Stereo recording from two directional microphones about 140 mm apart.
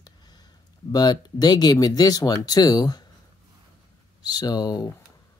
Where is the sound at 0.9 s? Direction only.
30° left (ahead or behind).